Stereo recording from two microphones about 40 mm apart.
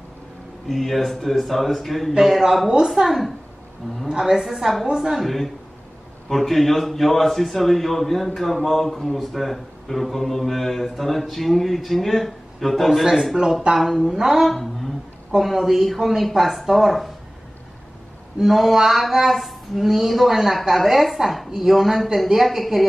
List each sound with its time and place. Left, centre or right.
0.7 s speech: centre
4.8 s a woman's voice: centre
5.1 s speech: centre
14.5 s a sound: centre
15.3 s speech: centre
18.4 s speech: centre